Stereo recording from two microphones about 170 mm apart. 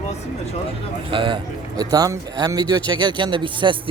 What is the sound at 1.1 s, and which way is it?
Speech, 30° right (ahead or behind).